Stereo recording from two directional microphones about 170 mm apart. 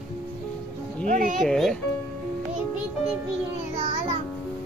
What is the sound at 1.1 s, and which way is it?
Speech, 50° right (ahead or behind).